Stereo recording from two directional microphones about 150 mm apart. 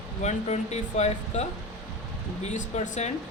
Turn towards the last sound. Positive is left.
turn(degrees=50)  # may be behind; listen again after turning